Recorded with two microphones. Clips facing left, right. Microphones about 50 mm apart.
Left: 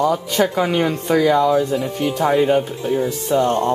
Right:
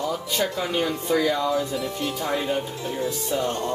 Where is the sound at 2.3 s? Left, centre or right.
Left.